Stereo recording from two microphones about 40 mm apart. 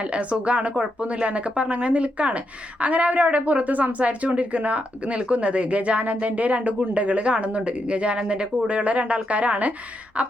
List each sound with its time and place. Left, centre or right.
0.0 s a woman's voice: right